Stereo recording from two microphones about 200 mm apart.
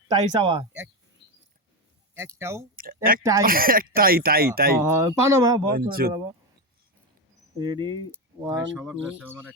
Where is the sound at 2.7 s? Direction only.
45° right (ahead or behind).